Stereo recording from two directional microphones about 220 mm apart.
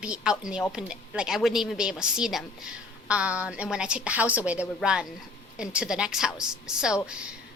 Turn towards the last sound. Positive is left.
turn(degrees=-5)  # may be behind; listen again after turning